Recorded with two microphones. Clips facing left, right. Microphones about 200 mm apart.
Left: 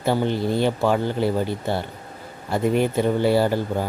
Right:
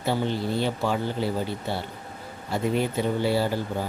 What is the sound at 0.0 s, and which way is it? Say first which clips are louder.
Speech: left 4 dB; 55° left (ahead or behind).